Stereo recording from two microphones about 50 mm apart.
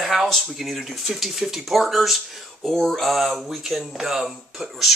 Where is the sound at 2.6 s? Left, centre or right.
Centre.